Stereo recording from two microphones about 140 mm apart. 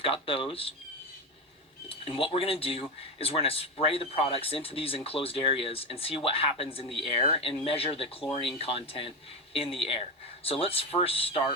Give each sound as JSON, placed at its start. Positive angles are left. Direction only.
{"t": 0.0, "sound": "speech", "side_deg": 40}
{"t": 1.9, "sound": "speech", "side_deg": 40}